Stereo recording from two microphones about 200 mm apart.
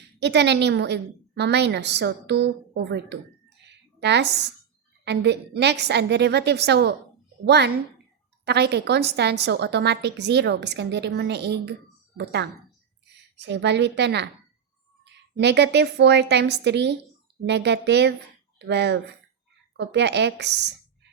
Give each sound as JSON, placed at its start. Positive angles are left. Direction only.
{"t": 0.2, "sound": "a woman's voice", "side_deg": -60}